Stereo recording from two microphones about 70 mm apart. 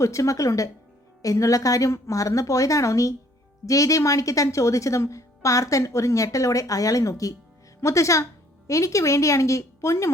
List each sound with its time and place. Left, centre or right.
0.0 s a woman's voice: left